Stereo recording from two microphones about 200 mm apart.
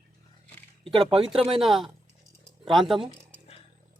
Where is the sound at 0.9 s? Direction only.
30° right (ahead or behind).